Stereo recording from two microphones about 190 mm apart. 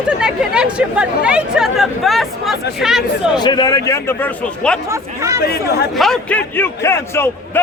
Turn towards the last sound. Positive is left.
turn(degrees=15)  # may be behind; listen again after turning